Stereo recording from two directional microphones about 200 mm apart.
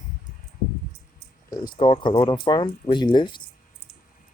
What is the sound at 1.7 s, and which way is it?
Speech, 25° left (ahead or behind).